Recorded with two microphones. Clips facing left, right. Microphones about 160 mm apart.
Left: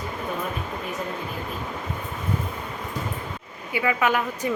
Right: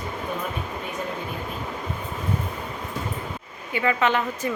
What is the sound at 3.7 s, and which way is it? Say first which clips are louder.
Speech: right 1 dB; 10° left (ahead or behind).